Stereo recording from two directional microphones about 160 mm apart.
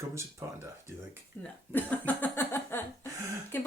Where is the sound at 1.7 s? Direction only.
10° left (ahead or behind).